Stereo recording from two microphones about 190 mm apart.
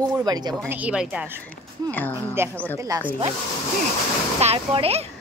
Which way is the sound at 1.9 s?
10° left (ahead or behind).